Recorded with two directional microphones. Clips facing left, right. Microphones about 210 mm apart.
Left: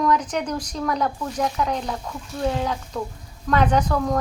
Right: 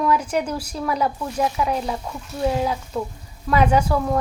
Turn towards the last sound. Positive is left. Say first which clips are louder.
# right 1 dB
turn(degrees=-5)  # may be behind; listen again after turning